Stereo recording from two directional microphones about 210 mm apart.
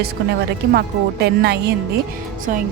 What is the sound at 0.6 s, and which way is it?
A woman's voice, 50° right (ahead or behind).